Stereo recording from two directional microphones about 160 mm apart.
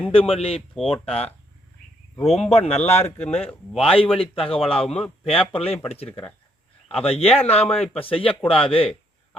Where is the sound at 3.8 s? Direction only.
35° left (ahead or behind).